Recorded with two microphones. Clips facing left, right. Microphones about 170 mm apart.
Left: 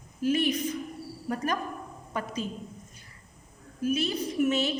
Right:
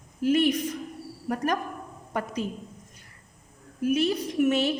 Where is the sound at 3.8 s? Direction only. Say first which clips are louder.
Right 4 dB; 60° right (ahead or behind).